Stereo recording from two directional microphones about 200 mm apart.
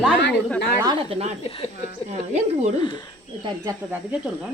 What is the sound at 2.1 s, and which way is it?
Speech, 35° right (ahead or behind).